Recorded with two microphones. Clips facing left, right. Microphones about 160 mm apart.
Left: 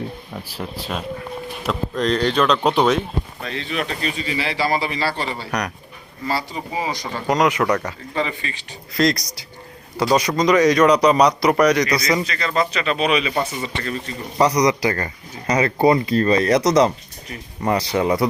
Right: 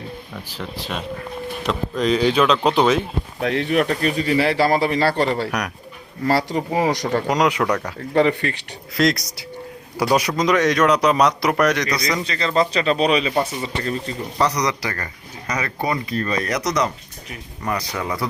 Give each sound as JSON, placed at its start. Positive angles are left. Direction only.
{"t": 0.5, "sound": "a man's voice", "side_deg": 0}
{"t": 3.4, "sound": "a man's voice", "side_deg": -65}
{"t": 5.5, "sound": "a man's voice", "side_deg": -5}
{"t": 6.2, "sound": "speech", "side_deg": -75}
{"t": 7.3, "sound": "a man's voice", "side_deg": 0}
{"t": 8.1, "sound": "a man's voice", "side_deg": -65}
{"t": 9.0, "sound": "a man's voice", "side_deg": 0}
{"t": 12.2, "sound": "speech", "side_deg": -30}
{"t": 14.3, "sound": "speech", "side_deg": 15}